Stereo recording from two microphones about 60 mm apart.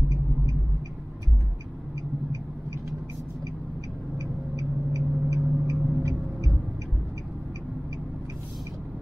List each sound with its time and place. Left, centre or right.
4.2 s vehicle: right